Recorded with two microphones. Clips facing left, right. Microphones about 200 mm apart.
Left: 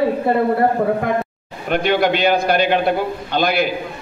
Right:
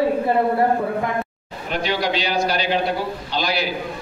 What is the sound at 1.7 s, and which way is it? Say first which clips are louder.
A man's voice: left 6 dB; 55° left (ahead or behind).